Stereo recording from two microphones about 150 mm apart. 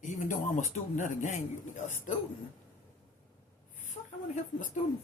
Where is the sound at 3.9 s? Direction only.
55° left (ahead or behind).